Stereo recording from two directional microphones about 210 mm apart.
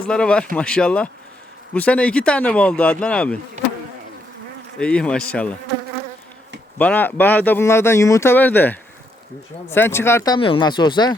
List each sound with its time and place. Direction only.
0.1 s speech: 5° left (ahead or behind)
4.8 s speech: 5° left (ahead or behind)
6.7 s speech: 10° left (ahead or behind)